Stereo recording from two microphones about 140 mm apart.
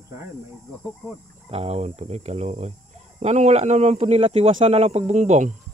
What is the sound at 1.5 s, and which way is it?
A man's voice, 50° right (ahead or behind).